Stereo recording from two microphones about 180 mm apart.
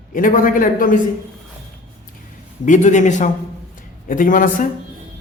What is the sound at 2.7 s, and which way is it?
Speech, 45° left (ahead or behind).